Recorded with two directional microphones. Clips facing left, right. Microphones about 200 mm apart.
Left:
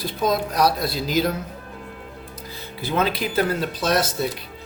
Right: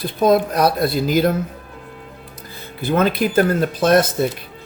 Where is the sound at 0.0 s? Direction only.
55° right (ahead or behind).